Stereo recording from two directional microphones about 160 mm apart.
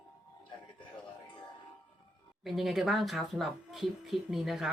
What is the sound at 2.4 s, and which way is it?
Speech, centre (ahead or behind).